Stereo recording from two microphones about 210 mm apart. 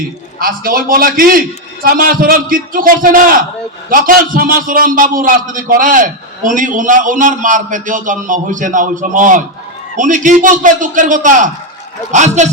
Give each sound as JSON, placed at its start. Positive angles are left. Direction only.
{"t": 0.3, "sound": "a man's voice", "side_deg": -45}